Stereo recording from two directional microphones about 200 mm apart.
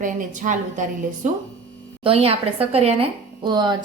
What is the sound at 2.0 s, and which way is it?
A woman's voice, 30° right (ahead or behind).